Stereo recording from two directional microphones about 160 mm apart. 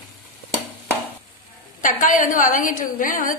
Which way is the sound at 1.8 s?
55° left (ahead or behind).